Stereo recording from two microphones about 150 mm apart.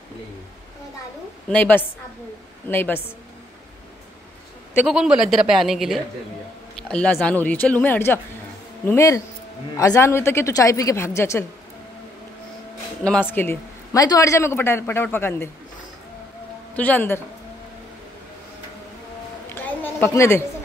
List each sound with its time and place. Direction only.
1.5 s speech: 10° left (ahead or behind)
4.8 s a man's voice: 5° right (ahead or behind); by 11.4 s 15° left (ahead or behind)
13.3 s speech: 15° left (ahead or behind)
16.7 s speech: 10° left (ahead or behind)
19.5 s a sound: 10° left (ahead or behind)